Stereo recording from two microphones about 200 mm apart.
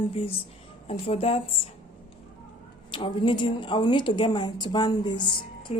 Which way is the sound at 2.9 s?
25° left (ahead or behind).